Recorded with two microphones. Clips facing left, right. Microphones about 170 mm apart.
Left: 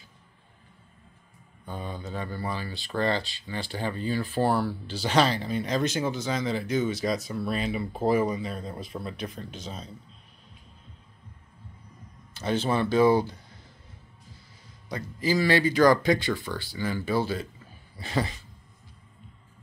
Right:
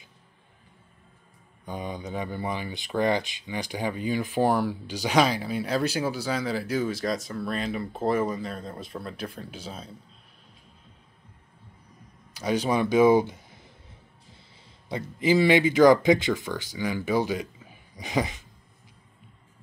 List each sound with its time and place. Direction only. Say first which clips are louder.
1.7 s speech: right 2 dB; 15° right (ahead or behind)
12.4 s speech: right 1 dB; 10° right (ahead or behind)
14.9 s speech: right 4 dB; 20° right (ahead or behind)